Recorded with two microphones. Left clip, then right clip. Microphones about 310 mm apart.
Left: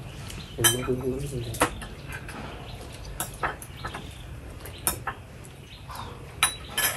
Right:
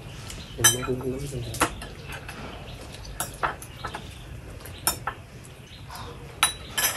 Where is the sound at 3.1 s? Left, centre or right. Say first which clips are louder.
Right 2 dB; centre.